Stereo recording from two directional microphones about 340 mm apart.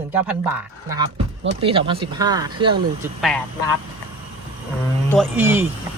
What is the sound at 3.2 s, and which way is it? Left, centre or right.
Speech, centre.